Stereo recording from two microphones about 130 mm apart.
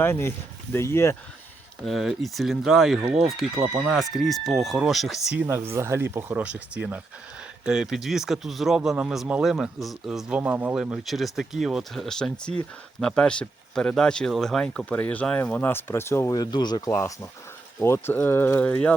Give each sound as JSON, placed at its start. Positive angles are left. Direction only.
{"t": 0.0, "sound": "speech", "side_deg": 20}
{"t": 1.8, "sound": "speech", "side_deg": 0}
{"t": 5.5, "sound": "speech", "side_deg": -20}
{"t": 16.3, "sound": "speech", "side_deg": 30}